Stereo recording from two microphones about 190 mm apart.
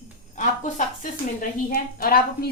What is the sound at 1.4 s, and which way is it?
A woman's voice, 50° left (ahead or behind).